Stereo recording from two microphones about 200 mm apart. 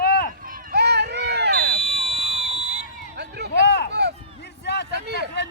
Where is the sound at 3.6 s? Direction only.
55° left (ahead or behind).